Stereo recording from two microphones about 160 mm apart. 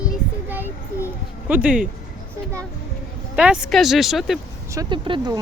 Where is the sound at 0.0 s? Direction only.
10° right (ahead or behind).